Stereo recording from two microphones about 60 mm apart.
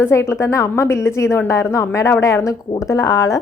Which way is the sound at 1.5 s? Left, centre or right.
Left.